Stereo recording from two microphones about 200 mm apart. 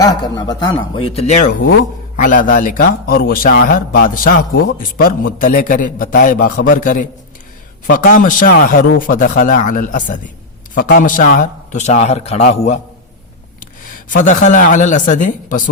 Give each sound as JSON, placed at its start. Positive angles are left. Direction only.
{"t": 0.0, "sound": "a man's voice", "side_deg": 20}
{"t": 14.1, "sound": "a man's voice", "side_deg": 40}